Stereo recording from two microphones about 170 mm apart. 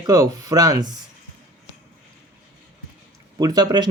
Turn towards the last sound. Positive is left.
turn(degrees=-25)  # may be behind; listen again after turning